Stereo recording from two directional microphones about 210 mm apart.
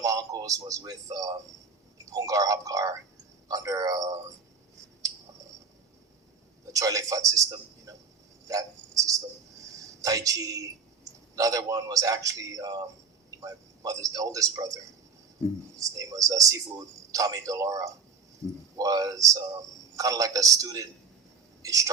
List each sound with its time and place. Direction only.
0.0 s a man's voice: 15° right (ahead or behind)
6.7 s a man's voice: 15° right (ahead or behind)
8.4 s cricket: 15° right (ahead or behind)
9.7 s a man's voice: 15° right (ahead or behind)
15.8 s a man's voice: 15° right (ahead or behind)